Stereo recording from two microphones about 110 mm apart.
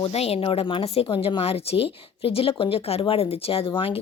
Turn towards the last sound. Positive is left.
turn(degrees=60)  # may be behind; listen again after turning